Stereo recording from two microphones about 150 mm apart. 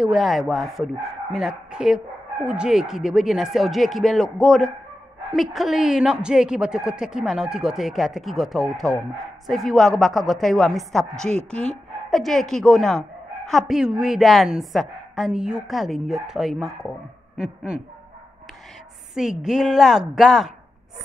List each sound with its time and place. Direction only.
0.0 s a woman's voice: centre (ahead or behind)
19.1 s a woman's voice: 5° right (ahead or behind)